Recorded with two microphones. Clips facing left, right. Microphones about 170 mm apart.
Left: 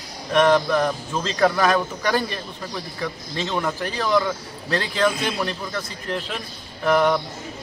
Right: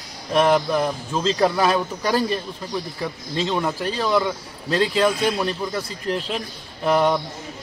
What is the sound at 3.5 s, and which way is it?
Speech, 15° right (ahead or behind).